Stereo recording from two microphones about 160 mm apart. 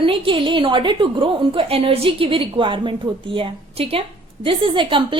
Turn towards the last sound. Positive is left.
turn(degrees=-30)  # may be behind; listen again after turning